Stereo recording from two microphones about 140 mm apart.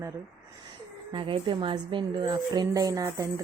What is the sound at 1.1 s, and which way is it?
Speech, 35° right (ahead or behind).